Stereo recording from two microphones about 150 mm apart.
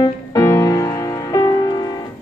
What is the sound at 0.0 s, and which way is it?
Music, 25° left (ahead or behind).